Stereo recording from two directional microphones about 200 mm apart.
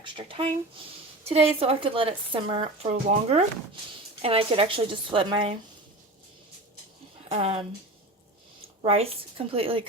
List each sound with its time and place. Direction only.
0.0 s a woman's voice: 25° right (ahead or behind)
7.3 s speech: 30° right (ahead or behind)
8.8 s a woman's voice: 30° right (ahead or behind)